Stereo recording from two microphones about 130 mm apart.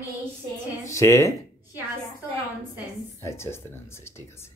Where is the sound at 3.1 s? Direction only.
20° left (ahead or behind).